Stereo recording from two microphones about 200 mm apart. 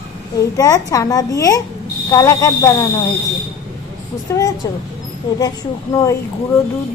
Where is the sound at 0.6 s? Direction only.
15° left (ahead or behind).